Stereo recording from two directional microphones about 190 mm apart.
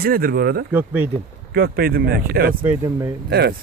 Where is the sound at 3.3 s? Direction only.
55° right (ahead or behind).